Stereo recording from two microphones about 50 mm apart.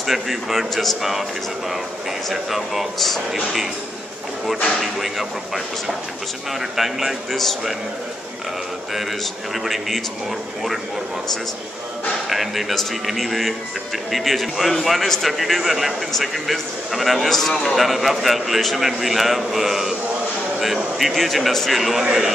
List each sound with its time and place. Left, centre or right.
0.0 s a man's voice: centre
2.2 s a man's voice: centre
4.9 s a man's voice: centre
6.6 s a man's voice: centre
8.9 s a man's voice: centre
12.3 s a man's voice: centre